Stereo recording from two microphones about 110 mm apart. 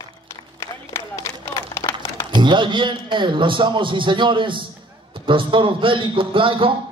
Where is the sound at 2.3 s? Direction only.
45° right (ahead or behind).